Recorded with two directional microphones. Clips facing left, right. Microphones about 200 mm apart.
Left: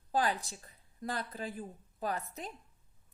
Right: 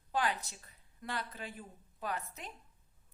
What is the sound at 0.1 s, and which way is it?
A woman's voice, 35° left (ahead or behind).